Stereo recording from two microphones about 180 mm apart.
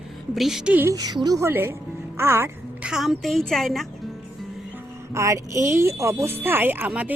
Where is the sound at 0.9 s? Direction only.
20° right (ahead or behind).